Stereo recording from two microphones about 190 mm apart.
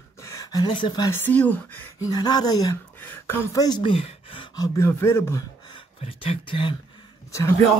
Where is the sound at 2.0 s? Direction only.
20° left (ahead or behind).